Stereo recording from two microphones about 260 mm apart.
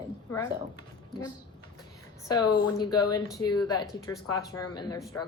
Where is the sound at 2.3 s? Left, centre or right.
Centre.